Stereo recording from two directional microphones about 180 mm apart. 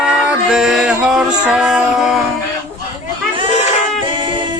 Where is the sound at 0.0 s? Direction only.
5° right (ahead or behind).